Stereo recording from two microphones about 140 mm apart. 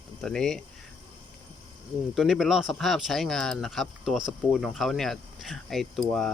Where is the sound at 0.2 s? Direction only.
5° left (ahead or behind).